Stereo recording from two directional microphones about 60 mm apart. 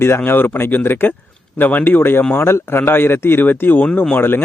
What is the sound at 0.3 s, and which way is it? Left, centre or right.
Speech, left.